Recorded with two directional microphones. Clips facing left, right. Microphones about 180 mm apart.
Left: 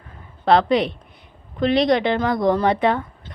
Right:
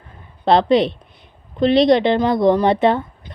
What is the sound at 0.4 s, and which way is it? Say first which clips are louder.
A woman's voice: right 3 dB; 25° right (ahead or behind).